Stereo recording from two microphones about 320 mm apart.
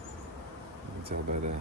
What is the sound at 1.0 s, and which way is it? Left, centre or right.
Speech, centre.